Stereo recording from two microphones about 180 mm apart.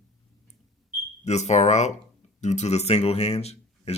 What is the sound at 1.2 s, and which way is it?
Speech, 40° left (ahead or behind).